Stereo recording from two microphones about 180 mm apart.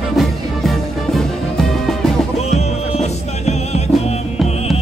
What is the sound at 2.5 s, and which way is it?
Music, 35° left (ahead or behind).